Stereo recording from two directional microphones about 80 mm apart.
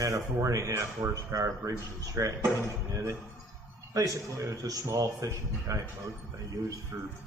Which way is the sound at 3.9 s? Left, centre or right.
Right.